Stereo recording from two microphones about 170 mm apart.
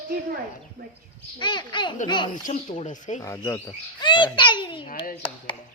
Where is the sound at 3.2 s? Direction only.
15° left (ahead or behind).